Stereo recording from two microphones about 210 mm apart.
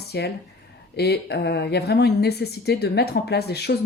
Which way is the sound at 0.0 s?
50° left (ahead or behind).